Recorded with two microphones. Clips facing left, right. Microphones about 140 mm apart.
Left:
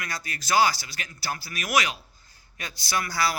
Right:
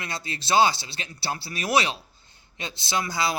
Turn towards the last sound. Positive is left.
turn(degrees=-20)  # may be behind; listen again after turning